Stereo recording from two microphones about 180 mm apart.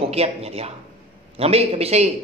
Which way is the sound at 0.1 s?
35° right (ahead or behind).